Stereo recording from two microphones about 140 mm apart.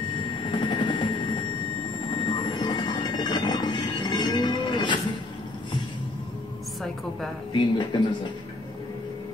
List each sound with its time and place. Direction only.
0.5 s music: 35° left (ahead or behind)
2.2 s train: 35° left (ahead or behind)
7.5 s speech: 35° left (ahead or behind)